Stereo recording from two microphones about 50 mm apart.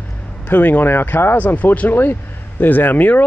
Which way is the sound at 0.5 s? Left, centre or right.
Left.